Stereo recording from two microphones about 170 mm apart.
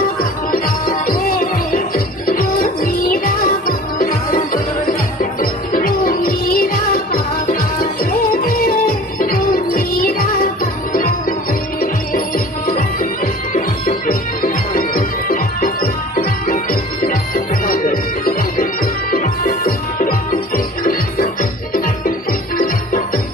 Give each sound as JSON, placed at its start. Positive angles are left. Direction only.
{"t": 0.2, "sound": "music", "side_deg": 55}
{"t": 22.3, "sound": "music", "side_deg": 55}